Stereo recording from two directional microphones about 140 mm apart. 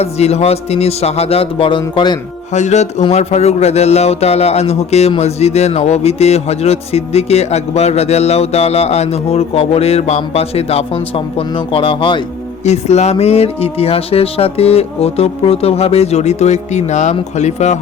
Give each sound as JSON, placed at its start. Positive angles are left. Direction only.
{"t": 0.0, "sound": "a man's voice", "side_deg": 50}
{"t": 2.5, "sound": "music", "side_deg": 55}
{"t": 3.1, "sound": "a man's voice", "side_deg": 50}
{"t": 12.6, "sound": "a man's voice", "side_deg": 50}